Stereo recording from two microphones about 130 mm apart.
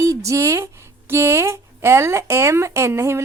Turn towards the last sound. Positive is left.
turn(degrees=-20)  # may be behind; listen again after turning